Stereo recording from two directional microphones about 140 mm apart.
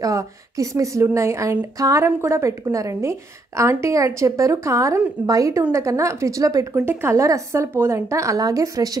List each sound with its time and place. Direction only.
0.0 s a woman's voice: 25° right (ahead or behind)